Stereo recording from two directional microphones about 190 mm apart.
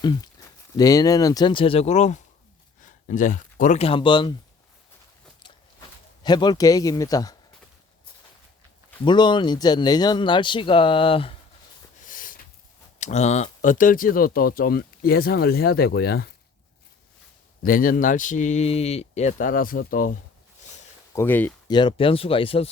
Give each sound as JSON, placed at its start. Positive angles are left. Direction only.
{"t": 0.0, "sound": "speech", "side_deg": 20}
{"t": 6.2, "sound": "speech", "side_deg": 20}
{"t": 9.0, "sound": "speech", "side_deg": 25}
{"t": 11.9, "sound": "snort", "side_deg": 45}
{"t": 13.0, "sound": "speech", "side_deg": 35}
{"t": 17.6, "sound": "speech", "side_deg": 50}
{"t": 21.2, "sound": "speech", "side_deg": 10}
{"t": 21.7, "sound": "speech", "side_deg": 25}